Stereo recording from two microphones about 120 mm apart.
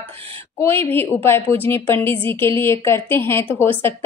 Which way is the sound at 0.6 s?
20° left (ahead or behind).